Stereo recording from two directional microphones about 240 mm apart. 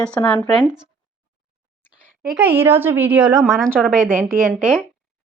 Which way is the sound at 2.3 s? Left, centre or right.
Centre.